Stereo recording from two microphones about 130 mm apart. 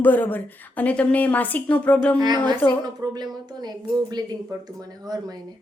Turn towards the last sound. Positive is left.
turn(degrees=-30)  # may be behind; listen again after turning